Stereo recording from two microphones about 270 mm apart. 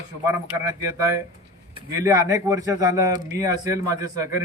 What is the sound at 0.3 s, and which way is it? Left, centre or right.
Speech, centre.